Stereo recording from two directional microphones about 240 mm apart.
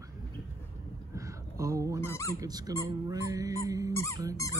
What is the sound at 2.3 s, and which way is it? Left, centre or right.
Speech, centre.